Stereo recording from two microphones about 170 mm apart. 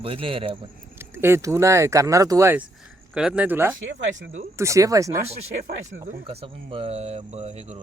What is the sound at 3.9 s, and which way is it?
Speech, 90° right.